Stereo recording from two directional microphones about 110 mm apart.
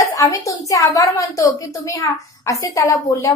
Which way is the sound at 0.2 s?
30° left (ahead or behind).